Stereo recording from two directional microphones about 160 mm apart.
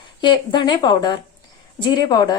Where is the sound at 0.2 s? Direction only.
30° left (ahead or behind).